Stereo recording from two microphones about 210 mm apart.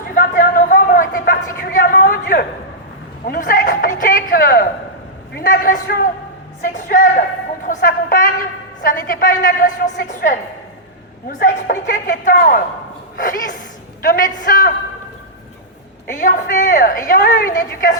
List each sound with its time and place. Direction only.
0.1 s a sound: 40° left (ahead or behind)
3.2 s a woman's voice: 40° left (ahead or behind)
16.1 s a woman's voice: 40° left (ahead or behind)